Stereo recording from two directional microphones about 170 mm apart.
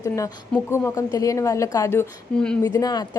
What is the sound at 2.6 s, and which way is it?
Speech, 20° left (ahead or behind).